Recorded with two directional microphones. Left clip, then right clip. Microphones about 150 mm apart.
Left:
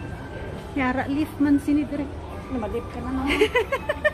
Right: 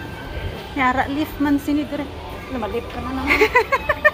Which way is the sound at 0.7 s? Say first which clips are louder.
Right 6 dB; 20° left (ahead or behind).